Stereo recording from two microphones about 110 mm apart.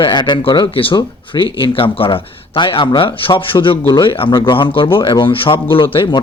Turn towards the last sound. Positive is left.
turn(degrees=50)  # may be behind; listen again after turning